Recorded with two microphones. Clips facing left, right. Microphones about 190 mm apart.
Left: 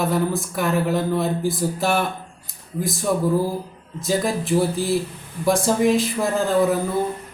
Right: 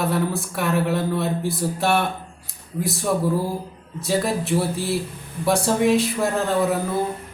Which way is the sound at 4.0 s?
Centre (ahead or behind).